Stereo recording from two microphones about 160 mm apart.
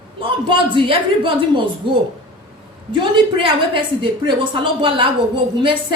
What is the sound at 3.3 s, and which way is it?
A woman's voice, 30° right (ahead or behind).